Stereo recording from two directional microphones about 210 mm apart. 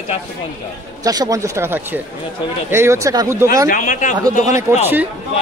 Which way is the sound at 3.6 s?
40° left (ahead or behind).